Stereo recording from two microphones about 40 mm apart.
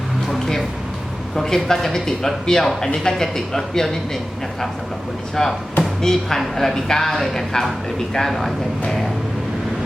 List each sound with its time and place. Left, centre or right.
0.3 s a sound: centre
1.4 s speech: centre
5.4 s a man's voice: centre